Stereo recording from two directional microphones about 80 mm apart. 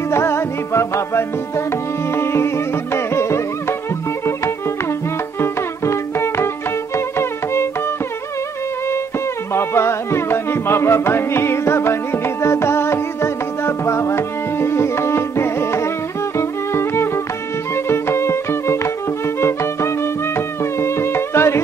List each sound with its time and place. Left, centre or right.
0.1 s music: left
5.4 s music: left
9.5 s music: left